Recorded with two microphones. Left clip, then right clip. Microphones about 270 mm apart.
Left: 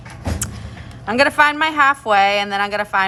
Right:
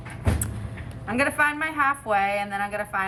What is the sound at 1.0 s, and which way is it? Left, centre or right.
A woman's voice, centre.